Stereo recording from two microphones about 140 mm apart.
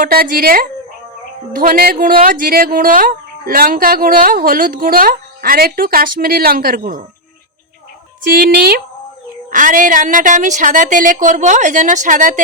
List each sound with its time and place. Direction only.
0.0 s speech: 85° right
9.5 s a woman's voice: 70° right (ahead or behind)